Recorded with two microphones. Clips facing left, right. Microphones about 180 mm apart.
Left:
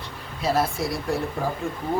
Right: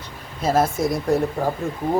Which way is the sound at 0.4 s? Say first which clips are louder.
Right 4 dB; 45° right (ahead or behind).